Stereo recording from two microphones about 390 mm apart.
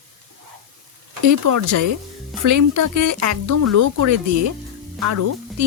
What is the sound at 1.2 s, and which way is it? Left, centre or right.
Speech, right.